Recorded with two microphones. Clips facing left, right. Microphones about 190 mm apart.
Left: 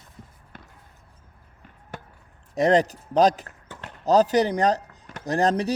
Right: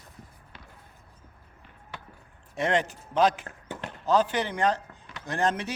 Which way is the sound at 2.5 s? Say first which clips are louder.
Left 7 dB; 40° left (ahead or behind).